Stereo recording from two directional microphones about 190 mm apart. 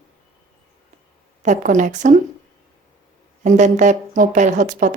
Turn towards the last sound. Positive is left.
turn(degrees=-40)  # may be behind; listen again after turning